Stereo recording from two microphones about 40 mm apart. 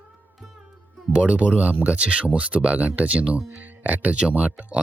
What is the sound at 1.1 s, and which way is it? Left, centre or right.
Speech, right.